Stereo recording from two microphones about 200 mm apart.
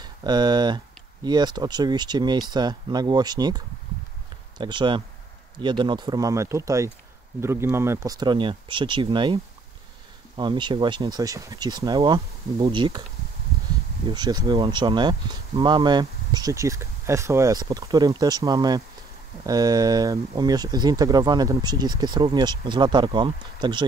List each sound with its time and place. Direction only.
0.0 s speech: 20° right (ahead or behind)
14.0 s speech: 20° right (ahead or behind)